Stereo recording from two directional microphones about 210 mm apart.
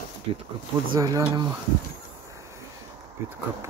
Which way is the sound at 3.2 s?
10° right (ahead or behind).